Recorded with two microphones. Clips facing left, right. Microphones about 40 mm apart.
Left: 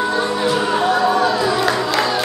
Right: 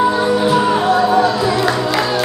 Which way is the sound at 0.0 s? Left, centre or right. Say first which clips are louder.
Right 4 dB; centre.